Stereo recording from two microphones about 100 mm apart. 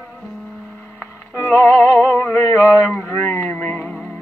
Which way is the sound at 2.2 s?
20° left (ahead or behind).